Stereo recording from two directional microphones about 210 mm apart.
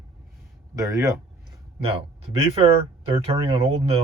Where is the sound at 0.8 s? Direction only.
15° right (ahead or behind).